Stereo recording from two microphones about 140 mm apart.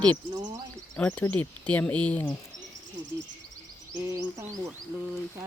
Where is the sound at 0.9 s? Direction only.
10° left (ahead or behind).